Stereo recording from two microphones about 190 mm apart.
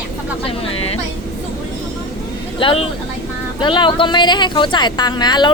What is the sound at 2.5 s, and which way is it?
A woman's voice, 25° left (ahead or behind).